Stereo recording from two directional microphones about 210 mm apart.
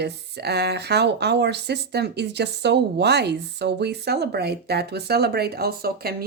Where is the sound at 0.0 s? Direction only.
50° right (ahead or behind).